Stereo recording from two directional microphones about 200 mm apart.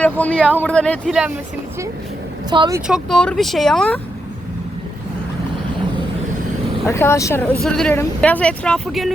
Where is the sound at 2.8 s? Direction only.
Centre (ahead or behind).